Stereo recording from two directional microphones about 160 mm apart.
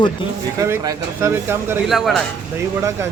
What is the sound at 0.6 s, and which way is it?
Speech, 20° right (ahead or behind).